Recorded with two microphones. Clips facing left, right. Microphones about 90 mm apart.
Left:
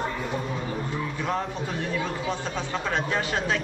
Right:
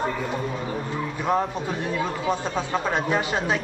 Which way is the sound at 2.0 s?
15° right (ahead or behind).